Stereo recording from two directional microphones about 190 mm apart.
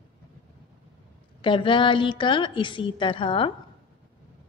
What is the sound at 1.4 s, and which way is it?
A woman's voice, 25° left (ahead or behind).